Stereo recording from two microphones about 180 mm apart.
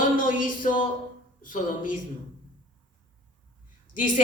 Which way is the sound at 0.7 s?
45° left (ahead or behind).